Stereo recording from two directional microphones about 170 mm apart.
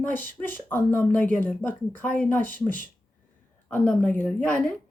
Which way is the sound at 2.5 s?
50° right (ahead or behind).